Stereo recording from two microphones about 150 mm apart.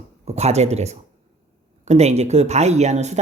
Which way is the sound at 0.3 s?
45° right (ahead or behind).